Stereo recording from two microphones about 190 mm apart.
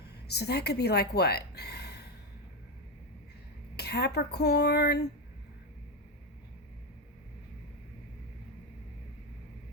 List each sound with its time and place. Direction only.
0.3 s speech: 60° left (ahead or behind)
3.8 s speech: 60° left (ahead or behind)